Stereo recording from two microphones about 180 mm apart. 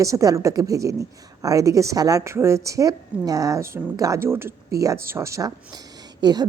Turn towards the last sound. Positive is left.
turn(degrees=-20)  # may be behind; listen again after turning